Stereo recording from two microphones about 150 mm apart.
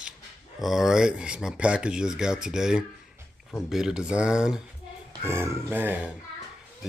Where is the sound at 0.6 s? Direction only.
Centre (ahead or behind).